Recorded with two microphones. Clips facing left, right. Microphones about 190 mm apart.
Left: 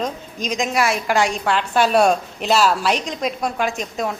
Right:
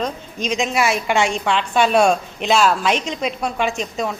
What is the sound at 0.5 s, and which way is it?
A woman's voice, centre (ahead or behind).